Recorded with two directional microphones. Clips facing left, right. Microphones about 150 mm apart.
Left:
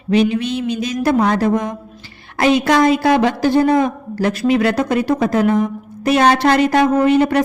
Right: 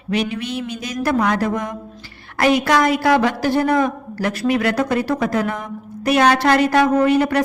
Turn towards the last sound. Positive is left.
turn(degrees=25)  # may be behind; listen again after turning